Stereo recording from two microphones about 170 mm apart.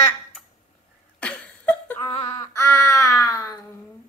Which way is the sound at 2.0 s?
30° left (ahead or behind).